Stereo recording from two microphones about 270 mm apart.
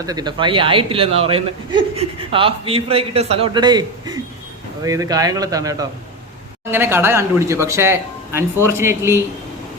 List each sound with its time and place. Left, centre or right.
0.0 s a man's voice: centre